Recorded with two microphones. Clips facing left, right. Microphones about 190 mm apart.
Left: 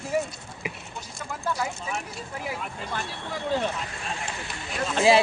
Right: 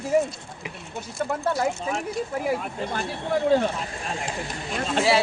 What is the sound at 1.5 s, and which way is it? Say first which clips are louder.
Speech: right 6 dB; 40° right (ahead or behind).